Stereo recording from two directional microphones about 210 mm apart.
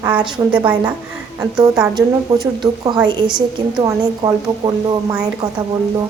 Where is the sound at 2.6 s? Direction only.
15° right (ahead or behind).